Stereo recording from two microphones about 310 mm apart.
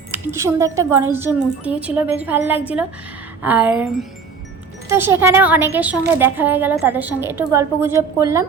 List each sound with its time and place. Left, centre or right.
0.1 s a woman's voice: centre